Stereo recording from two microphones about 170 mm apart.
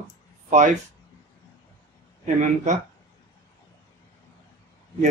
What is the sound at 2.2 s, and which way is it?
Speech, 45° right (ahead or behind).